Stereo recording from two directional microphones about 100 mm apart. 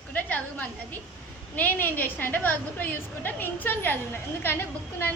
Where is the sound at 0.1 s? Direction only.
15° left (ahead or behind).